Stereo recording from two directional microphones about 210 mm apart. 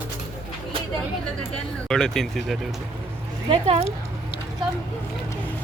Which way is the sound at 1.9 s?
Centre (ahead or behind).